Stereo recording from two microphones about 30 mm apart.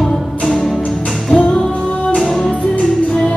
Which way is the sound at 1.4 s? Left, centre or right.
Left.